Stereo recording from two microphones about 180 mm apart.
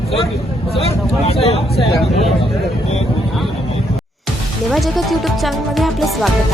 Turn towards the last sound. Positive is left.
turn(degrees=0)  # may be behind; listen again after turning